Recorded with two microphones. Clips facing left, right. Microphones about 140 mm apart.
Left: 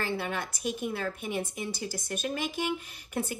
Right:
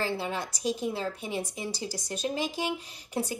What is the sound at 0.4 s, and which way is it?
Speech, 55° left (ahead or behind).